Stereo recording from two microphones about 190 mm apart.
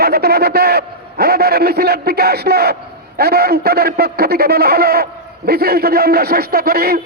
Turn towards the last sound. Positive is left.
turn(degrees=-55)  # may be behind; listen again after turning